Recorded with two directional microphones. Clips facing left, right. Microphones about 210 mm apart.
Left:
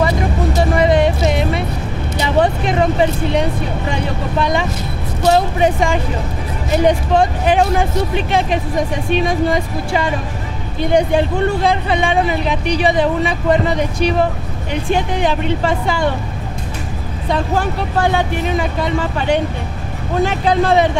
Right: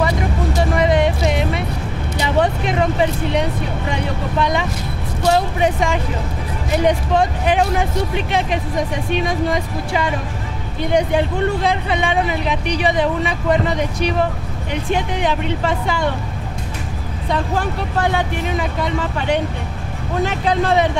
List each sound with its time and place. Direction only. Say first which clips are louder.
0.6 s music: left 3 dB; 35° left (ahead or behind)
2.1 s speech: left 2 dB; 35° left (ahead or behind)
5.2 s speech: left 3 dB; 25° left (ahead or behind)
5.6 s speech: left 3 dB; 35° left (ahead or behind)
17.9 s speech: left 3 dB; 30° left (ahead or behind)
20.2 s speech: left 3 dB; 30° left (ahead or behind)